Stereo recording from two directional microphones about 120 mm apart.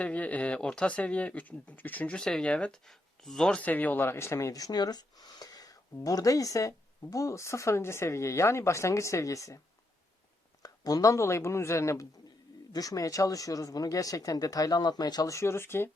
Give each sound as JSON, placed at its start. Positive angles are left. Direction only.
{"t": 0.0, "sound": "speech", "side_deg": 10}
{"t": 10.6, "sound": "speech", "side_deg": 30}